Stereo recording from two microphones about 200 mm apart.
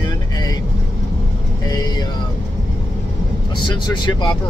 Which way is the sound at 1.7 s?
20° left (ahead or behind).